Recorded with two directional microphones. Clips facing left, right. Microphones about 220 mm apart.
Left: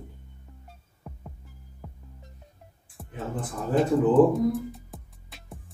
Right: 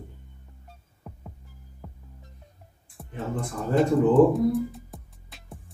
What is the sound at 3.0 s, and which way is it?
Speech, centre (ahead or behind).